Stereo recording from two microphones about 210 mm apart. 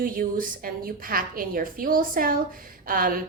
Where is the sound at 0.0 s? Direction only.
40° right (ahead or behind).